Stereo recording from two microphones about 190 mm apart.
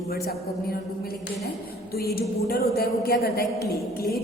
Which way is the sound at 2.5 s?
55° left (ahead or behind).